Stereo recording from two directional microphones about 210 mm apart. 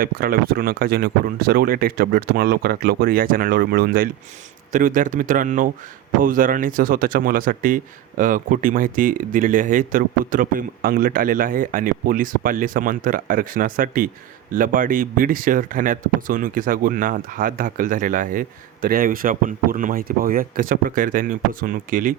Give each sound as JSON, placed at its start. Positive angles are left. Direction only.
{"t": 0.0, "sound": "speech", "side_deg": -45}